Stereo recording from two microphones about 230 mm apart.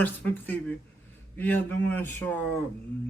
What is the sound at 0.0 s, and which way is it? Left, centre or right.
Speech, centre.